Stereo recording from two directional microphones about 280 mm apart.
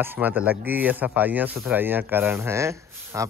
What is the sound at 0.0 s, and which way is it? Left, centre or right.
Speech, centre.